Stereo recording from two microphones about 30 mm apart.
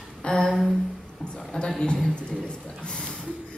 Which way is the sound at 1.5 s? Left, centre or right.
Left.